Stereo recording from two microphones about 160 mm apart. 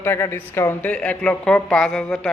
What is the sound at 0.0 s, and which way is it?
A woman's voice, 15° left (ahead or behind).